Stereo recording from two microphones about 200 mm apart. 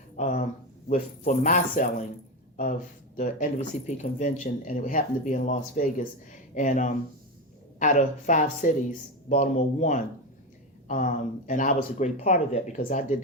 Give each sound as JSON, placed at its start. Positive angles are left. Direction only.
{"t": 0.2, "sound": "a sound", "side_deg": 40}
{"t": 0.9, "sound": "speech", "side_deg": 40}
{"t": 3.2, "sound": "speech", "side_deg": 40}